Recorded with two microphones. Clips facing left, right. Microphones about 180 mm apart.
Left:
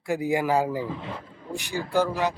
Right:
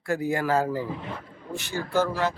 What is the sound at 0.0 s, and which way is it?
Speech, 15° left (ahead or behind).